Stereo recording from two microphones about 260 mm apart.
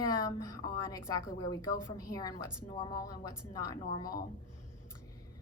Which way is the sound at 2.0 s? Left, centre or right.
Centre.